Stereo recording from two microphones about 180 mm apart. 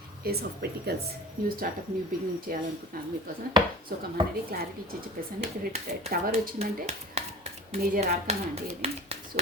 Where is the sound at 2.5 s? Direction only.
50° right (ahead or behind).